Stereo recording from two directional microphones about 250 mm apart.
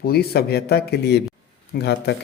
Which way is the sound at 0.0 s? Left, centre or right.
Left.